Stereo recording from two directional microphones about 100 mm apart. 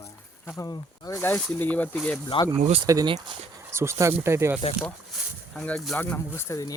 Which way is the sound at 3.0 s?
55° right (ahead or behind).